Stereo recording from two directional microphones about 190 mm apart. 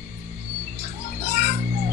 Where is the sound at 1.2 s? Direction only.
35° left (ahead or behind).